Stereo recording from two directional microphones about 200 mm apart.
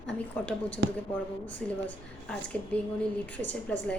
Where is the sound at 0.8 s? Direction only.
60° right (ahead or behind).